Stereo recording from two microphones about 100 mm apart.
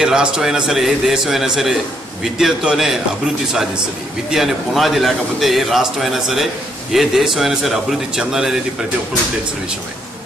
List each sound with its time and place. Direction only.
0.0 s a man's voice: 5° right (ahead or behind)
4.3 s a man's voice: centre (ahead or behind)